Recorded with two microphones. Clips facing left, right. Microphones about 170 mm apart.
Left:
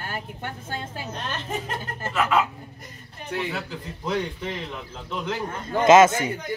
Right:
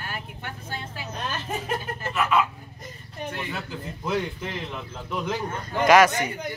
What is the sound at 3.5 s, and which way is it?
Speech, centre (ahead or behind).